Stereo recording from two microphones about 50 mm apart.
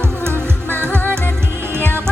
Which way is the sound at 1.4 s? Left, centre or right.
Right.